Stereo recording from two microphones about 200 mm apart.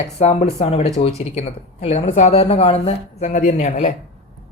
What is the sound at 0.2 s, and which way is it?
Speech, 35° left (ahead or behind).